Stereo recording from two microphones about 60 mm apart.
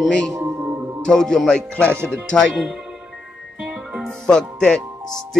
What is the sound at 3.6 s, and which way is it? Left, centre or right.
Music, centre.